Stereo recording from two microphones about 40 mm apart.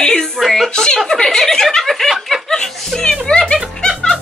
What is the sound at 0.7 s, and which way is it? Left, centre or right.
Speech, centre.